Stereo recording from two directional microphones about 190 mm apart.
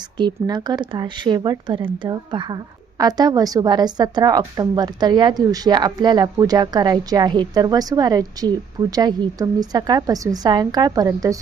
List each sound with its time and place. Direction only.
0.2 s a woman's voice: 20° right (ahead or behind)